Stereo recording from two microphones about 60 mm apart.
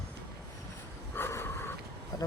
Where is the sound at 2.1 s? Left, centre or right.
Left.